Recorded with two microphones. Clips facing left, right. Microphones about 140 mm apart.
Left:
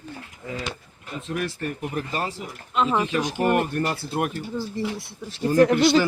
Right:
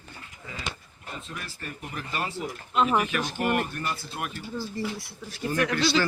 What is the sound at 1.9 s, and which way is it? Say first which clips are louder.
Speech: left 2 dB; 35° left (ahead or behind).